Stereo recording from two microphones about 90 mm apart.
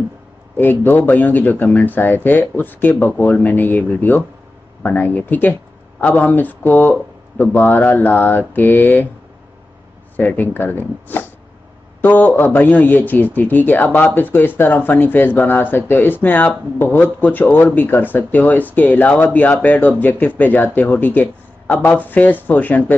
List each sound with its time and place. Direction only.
0.6 s speech: 20° left (ahead or behind)
10.1 s speech: 20° left (ahead or behind)